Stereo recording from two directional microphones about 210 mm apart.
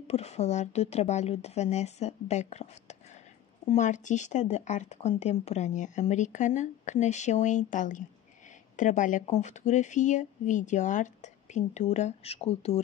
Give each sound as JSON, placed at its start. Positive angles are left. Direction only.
{"t": 0.0, "sound": "speech", "side_deg": 30}